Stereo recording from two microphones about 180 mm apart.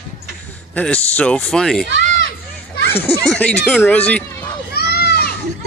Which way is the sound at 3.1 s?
5° left (ahead or behind).